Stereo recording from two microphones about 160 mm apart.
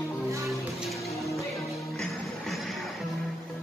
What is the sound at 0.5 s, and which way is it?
Music, centre (ahead or behind).